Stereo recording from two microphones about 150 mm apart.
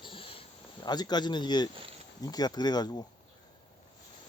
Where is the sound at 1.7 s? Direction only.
35° right (ahead or behind).